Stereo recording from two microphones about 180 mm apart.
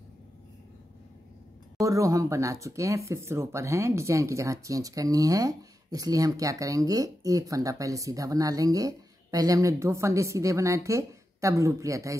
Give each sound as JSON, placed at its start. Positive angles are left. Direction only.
{"t": 1.8, "sound": "speech", "side_deg": -20}